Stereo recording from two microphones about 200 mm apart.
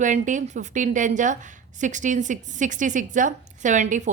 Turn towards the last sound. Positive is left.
turn(degrees=-35)  # may be behind; listen again after turning